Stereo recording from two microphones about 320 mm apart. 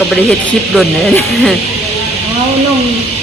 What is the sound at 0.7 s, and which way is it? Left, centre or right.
Speech, centre.